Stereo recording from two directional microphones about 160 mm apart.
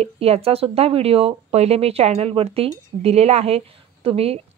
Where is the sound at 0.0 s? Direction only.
40° right (ahead or behind).